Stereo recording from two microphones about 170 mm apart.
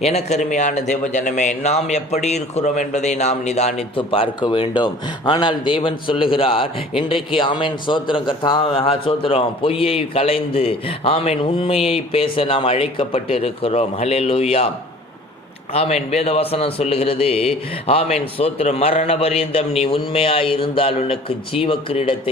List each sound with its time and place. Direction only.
0.0 s a man's voice: 40° left (ahead or behind)
15.7 s a man's voice: 40° left (ahead or behind)